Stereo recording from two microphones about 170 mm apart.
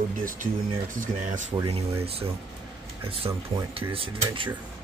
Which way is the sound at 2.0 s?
35° right (ahead or behind).